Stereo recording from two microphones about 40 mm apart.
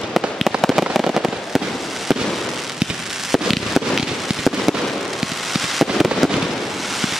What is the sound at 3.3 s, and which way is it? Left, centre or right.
Fireworks, centre.